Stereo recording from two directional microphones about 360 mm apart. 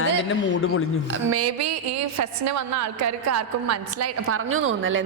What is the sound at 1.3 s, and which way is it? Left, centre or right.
A woman's voice, right.